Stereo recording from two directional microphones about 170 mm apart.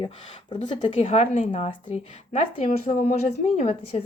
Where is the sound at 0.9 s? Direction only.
40° left (ahead or behind).